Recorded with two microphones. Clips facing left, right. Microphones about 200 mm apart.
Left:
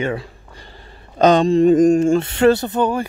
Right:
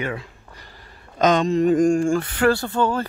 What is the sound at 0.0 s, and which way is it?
Speech, 30° left (ahead or behind).